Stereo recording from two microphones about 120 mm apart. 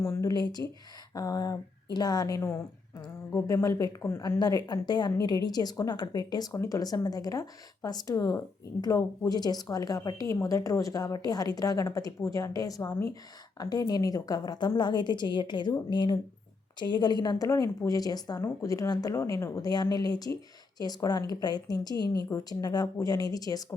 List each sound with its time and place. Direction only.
0.0 s speech: 25° left (ahead or behind)